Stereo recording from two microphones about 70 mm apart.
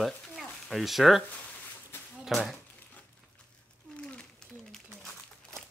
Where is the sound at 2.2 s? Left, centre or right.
Centre.